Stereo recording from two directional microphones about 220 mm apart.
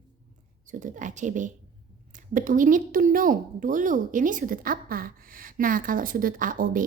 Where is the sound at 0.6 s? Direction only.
35° right (ahead or behind).